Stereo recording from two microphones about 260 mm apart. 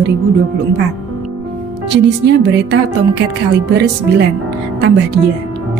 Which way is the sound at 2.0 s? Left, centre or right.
Right.